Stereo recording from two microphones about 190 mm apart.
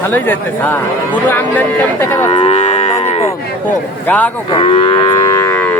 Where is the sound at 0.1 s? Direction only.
10° left (ahead or behind).